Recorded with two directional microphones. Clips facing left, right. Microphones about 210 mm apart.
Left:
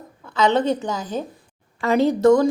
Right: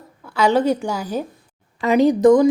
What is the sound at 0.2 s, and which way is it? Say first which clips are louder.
A woman's voice: right 2 dB; 10° right (ahead or behind).